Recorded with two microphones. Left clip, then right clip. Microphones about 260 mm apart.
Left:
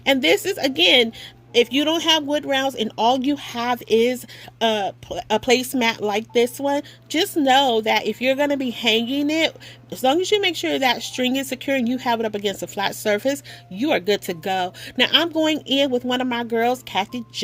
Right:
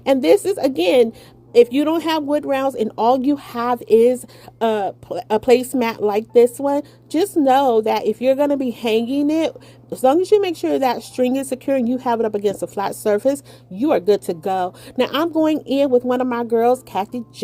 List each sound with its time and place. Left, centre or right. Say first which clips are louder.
0.0 s a woman's voice: right 3 dB; left